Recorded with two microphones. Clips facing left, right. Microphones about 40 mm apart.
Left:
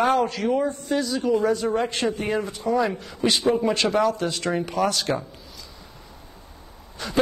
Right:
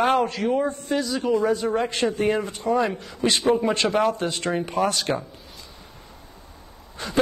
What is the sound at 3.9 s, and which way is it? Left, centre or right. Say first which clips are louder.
Speech: even; right.